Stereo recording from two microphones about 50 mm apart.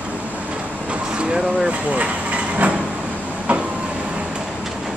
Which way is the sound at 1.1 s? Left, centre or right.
Centre.